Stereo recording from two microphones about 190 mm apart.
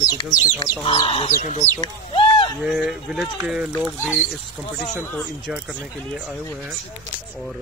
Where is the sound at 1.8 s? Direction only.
25° left (ahead or behind).